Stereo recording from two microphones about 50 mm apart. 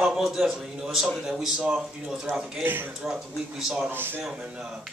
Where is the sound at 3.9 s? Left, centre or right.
Right.